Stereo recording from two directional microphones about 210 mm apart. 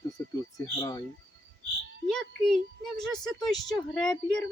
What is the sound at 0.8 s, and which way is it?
Speech, 15° left (ahead or behind).